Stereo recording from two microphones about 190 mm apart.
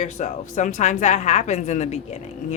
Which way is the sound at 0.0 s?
40° left (ahead or behind).